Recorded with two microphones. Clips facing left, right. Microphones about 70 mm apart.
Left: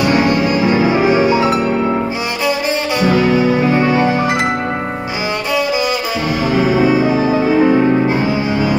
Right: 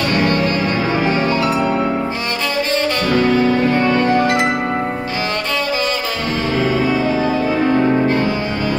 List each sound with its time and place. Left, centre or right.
0.0 s music: centre
3.0 s music: centre
6.5 s music: centre